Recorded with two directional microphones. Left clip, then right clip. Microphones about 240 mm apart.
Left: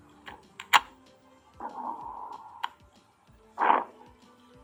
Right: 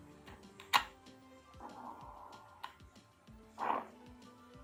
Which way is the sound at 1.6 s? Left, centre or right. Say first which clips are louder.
Left 12 dB; left.